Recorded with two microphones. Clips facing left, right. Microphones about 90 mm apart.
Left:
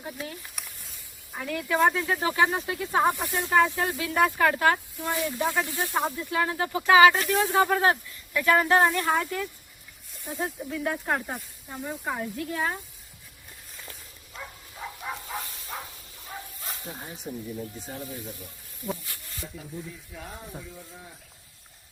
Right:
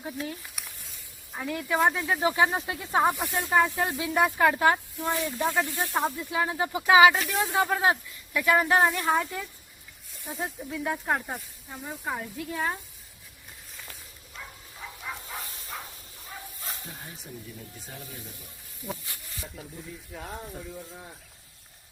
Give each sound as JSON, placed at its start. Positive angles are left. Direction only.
{"t": 0.0, "sound": "snake", "side_deg": 0}
{"t": 1.5, "sound": "speech", "side_deg": -15}
{"t": 2.2, "sound": "speech", "side_deg": -20}
{"t": 3.0, "sound": "speech", "side_deg": 0}
{"t": 3.5, "sound": "speech", "side_deg": -15}
{"t": 5.1, "sound": "speech", "side_deg": 15}
{"t": 5.7, "sound": "speech", "side_deg": -10}
{"t": 7.1, "sound": "speech", "side_deg": 0}
{"t": 17.3, "sound": "speech", "side_deg": 15}
{"t": 19.0, "sound": "snake", "side_deg": -15}
{"t": 20.1, "sound": "a sound", "side_deg": -35}